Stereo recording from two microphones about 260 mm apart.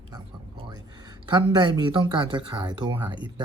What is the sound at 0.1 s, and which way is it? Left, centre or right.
Speech, centre.